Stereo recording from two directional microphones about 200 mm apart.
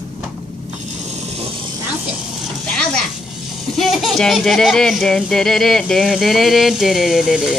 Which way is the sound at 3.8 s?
Centre (ahead or behind).